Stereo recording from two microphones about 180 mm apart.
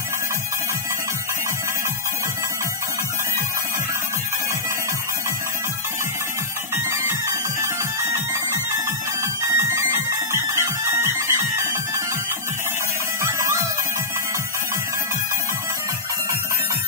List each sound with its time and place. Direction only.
6.7 s music: 15° right (ahead or behind)
13.2 s music: 15° right (ahead or behind)